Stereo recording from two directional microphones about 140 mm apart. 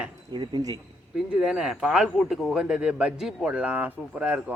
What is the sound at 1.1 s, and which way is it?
Speech, 5° right (ahead or behind).